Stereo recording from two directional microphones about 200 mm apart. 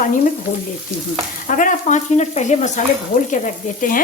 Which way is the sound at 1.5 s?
40° left (ahead or behind).